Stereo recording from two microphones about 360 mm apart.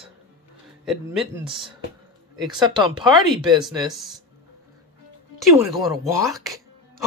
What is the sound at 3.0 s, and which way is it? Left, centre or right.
Speech, centre.